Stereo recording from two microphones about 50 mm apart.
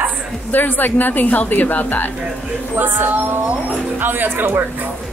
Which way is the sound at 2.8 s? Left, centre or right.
Right.